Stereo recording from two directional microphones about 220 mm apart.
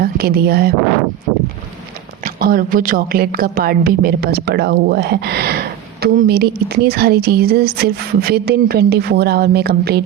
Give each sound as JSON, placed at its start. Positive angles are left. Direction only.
{"t": 0.0, "sound": "speech", "side_deg": -45}
{"t": 2.2, "sound": "a woman's voice", "side_deg": -40}